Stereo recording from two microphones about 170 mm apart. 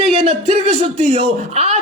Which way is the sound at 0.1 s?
35° right (ahead or behind).